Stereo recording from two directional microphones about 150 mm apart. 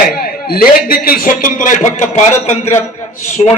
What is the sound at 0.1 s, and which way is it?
A man's voice, 80° left.